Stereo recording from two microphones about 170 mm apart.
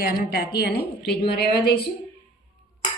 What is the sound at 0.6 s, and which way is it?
Speech, 75° left (ahead or behind).